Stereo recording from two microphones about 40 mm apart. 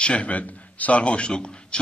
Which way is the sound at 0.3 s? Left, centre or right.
Left.